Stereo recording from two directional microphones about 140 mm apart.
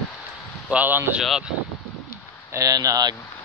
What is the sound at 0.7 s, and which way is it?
Speech, 15° right (ahead or behind).